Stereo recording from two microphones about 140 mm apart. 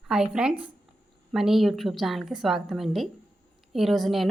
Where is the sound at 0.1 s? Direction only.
5° right (ahead or behind).